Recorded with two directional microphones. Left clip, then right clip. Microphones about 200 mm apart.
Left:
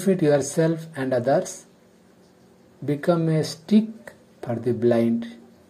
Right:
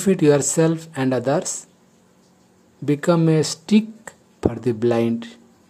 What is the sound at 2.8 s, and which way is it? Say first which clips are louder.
Speech: right 4 dB; 20° right (ahead or behind).